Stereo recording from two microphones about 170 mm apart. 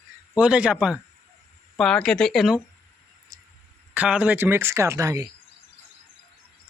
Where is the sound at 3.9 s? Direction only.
10° right (ahead or behind).